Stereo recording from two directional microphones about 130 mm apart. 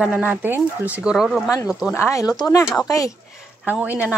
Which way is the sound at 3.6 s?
15° right (ahead or behind).